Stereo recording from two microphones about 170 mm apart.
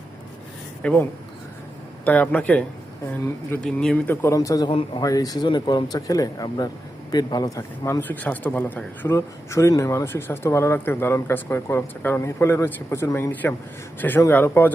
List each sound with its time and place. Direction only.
0.8 s speech: 5° left (ahead or behind)
2.0 s speech: 10° left (ahead or behind)
4.7 s speech: 35° left (ahead or behind)
5.0 s speech: 20° left (ahead or behind)